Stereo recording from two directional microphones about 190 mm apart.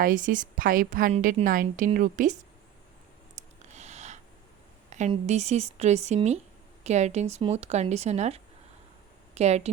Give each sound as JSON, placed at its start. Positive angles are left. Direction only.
{"t": 0.0, "sound": "a woman's voice", "side_deg": -45}
{"t": 3.7, "sound": "a sound", "side_deg": -35}
{"t": 5.1, "sound": "speech", "side_deg": -35}